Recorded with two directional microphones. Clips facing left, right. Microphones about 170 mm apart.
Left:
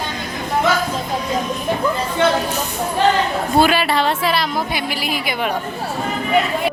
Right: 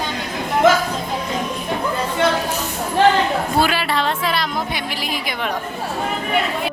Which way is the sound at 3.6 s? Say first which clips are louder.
Left 3 dB; 15° left (ahead or behind).